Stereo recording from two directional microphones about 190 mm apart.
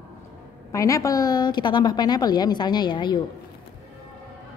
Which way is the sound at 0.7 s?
15° left (ahead or behind).